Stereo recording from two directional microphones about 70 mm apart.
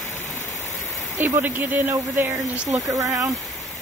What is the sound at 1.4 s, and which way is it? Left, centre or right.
Speech, right.